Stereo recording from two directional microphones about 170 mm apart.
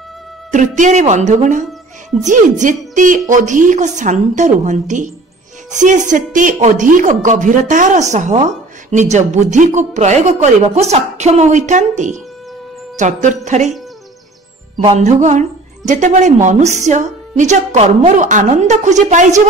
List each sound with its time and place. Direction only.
0.5 s speech: 45° right (ahead or behind)
12.9 s music: 45° right (ahead or behind)
13.5 s speech: 45° right (ahead or behind)
14.9 s speech: 45° right (ahead or behind)